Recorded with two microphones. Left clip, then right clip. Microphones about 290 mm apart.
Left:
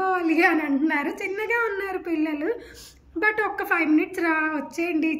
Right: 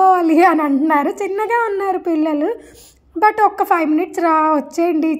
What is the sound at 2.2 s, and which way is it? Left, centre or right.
Speech, right.